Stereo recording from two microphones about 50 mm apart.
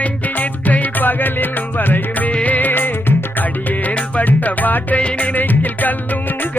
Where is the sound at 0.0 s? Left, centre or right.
Left.